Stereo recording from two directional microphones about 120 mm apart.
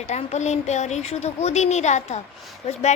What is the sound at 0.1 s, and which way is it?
A woman's voice, 70° left (ahead or behind).